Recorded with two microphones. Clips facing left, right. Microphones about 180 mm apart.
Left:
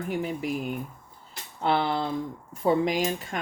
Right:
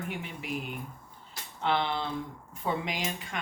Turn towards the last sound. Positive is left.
turn(degrees=45)  # may be behind; listen again after turning